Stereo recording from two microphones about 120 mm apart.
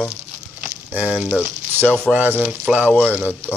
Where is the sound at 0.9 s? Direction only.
10° right (ahead or behind).